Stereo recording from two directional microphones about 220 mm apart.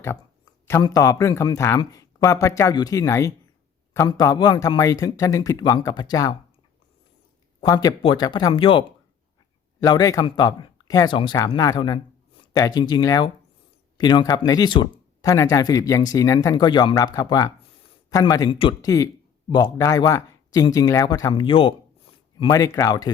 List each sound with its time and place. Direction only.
0.7 s a man's voice: 15° left (ahead or behind)
7.6 s speech: 15° left (ahead or behind)
9.8 s a man's voice: 15° left (ahead or behind)